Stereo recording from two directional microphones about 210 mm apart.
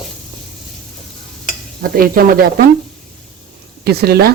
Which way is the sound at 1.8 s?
45° right (ahead or behind).